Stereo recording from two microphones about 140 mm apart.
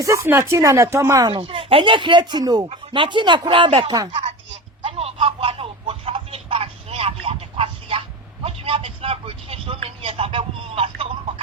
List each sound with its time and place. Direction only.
0.0 s speech: 20° right (ahead or behind)
1.3 s speech: 40° right (ahead or behind)
4.8 s a sound: 45° right (ahead or behind)